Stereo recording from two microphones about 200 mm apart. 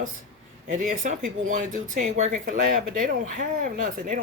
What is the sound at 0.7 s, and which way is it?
A woman's voice, 40° right (ahead or behind).